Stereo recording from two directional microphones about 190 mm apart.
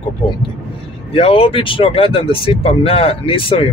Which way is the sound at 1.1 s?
30° left (ahead or behind).